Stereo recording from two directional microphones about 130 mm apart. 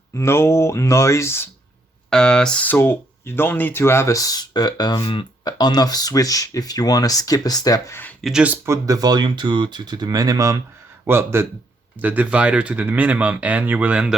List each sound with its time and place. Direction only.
0.2 s speech: 20° left (ahead or behind)
2.0 s speech: 5° left (ahead or behind); by 7.9 s 30° left (ahead or behind)
8.2 s speech: 5° right (ahead or behind)
8.6 s speech: 25° right (ahead or behind); by 14.2 s 5° right (ahead or behind)